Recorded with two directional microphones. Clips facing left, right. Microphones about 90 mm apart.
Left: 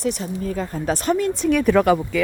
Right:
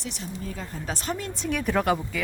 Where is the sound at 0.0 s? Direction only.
50° left (ahead or behind).